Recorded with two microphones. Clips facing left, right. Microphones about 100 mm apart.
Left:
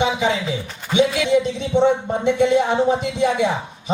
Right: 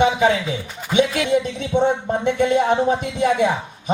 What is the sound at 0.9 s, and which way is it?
Speech, 50° right (ahead or behind).